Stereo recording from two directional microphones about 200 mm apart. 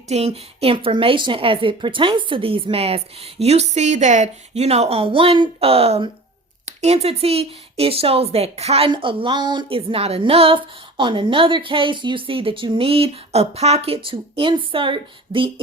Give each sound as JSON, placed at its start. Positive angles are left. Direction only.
{"t": 0.1, "sound": "speech", "side_deg": -30}